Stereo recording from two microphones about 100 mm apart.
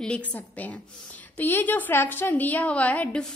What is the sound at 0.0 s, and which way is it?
A woman's voice, 15° left (ahead or behind).